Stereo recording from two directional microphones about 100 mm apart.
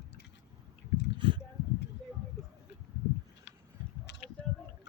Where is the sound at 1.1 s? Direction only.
55° right (ahead or behind).